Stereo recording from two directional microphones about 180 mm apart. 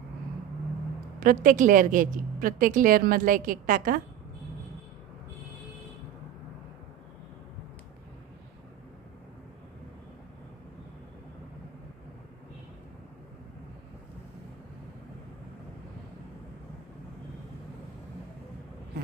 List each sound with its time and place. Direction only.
1.2 s a woman's voice: 50° right (ahead or behind)